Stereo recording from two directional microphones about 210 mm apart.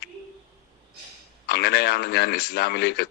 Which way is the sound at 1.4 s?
50° left (ahead or behind).